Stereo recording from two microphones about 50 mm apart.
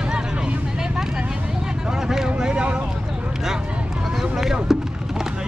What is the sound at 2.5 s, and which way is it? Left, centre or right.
Vehicle, right.